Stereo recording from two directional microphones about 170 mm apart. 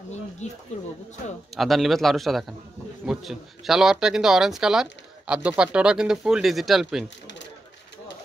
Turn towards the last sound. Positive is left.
turn(degrees=0)  # may be behind; listen again after turning